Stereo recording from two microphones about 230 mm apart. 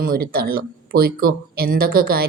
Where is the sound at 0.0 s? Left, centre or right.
Right.